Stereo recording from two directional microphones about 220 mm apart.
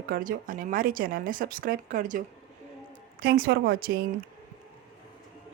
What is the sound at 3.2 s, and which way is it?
Speech, 40° right (ahead or behind).